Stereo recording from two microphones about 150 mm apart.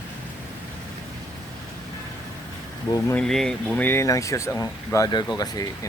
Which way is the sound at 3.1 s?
5° left (ahead or behind).